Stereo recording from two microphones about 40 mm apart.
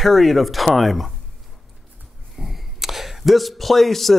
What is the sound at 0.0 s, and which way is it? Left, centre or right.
A man's voice, centre.